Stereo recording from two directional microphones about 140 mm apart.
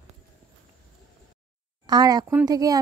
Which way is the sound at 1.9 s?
30° right (ahead or behind).